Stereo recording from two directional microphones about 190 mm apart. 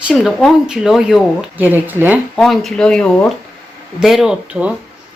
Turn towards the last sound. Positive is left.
turn(degrees=-5)  # may be behind; listen again after turning